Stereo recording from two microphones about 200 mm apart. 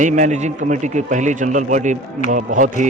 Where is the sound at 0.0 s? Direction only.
35° right (ahead or behind).